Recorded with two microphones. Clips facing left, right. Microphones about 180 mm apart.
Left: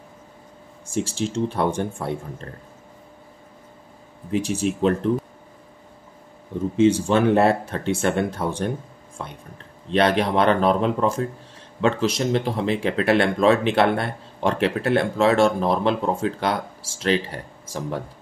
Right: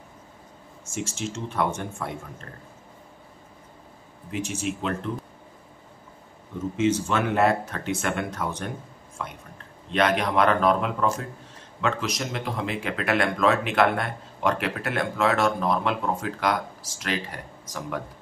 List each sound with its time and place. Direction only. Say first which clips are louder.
0.8 s speech: left 6 dB; 35° left (ahead or behind)
4.3 s speech: left 6 dB; 35° left (ahead or behind)
6.8 s speech: left 6 dB; 30° left (ahead or behind)